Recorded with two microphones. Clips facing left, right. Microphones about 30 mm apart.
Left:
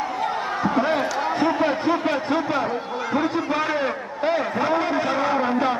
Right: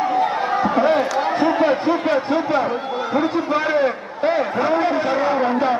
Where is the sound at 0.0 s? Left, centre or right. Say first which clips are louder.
Right 6 dB; centre.